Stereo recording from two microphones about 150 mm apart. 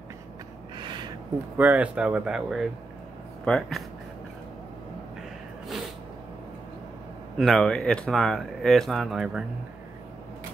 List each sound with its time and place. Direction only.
0.7 s a sound: 30° right (ahead or behind)
1.6 s speech: 10° right (ahead or behind)
7.3 s speech: centre (ahead or behind)